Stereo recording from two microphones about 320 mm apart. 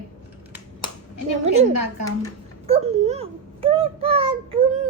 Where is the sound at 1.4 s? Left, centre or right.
Centre.